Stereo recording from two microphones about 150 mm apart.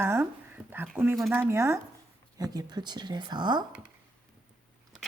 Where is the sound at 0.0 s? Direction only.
15° right (ahead or behind).